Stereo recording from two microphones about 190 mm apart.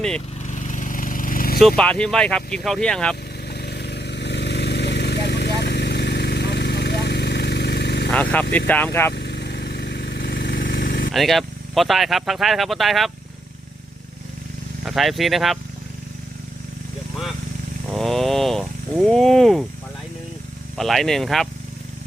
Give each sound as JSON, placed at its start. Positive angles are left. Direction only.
{"t": 0.4, "sound": "a sound", "side_deg": 40}
{"t": 1.5, "sound": "speech", "side_deg": 5}
{"t": 3.5, "sound": "vehicle", "side_deg": 60}
{"t": 8.1, "sound": "speech", "side_deg": 10}
{"t": 9.1, "sound": "vehicle", "side_deg": 60}
{"t": 11.1, "sound": "speech", "side_deg": 0}
{"t": 14.8, "sound": "speech", "side_deg": 0}
{"t": 17.8, "sound": "speech", "side_deg": 0}
{"t": 20.7, "sound": "speech", "side_deg": 0}